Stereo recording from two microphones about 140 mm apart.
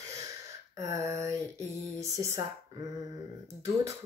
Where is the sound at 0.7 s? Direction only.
20° right (ahead or behind).